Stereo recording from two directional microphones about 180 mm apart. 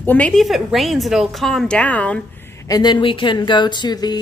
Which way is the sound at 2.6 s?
20° left (ahead or behind).